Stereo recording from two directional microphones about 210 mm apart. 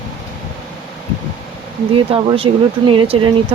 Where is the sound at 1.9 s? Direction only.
25° right (ahead or behind).